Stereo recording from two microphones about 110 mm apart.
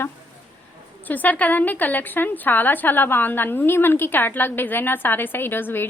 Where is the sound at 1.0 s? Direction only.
15° left (ahead or behind).